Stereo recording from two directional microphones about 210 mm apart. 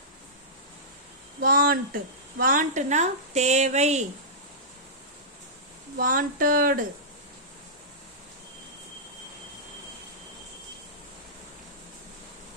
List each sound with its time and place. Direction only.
1.4 s speech: 45° right (ahead or behind)
6.0 s speech: 40° right (ahead or behind)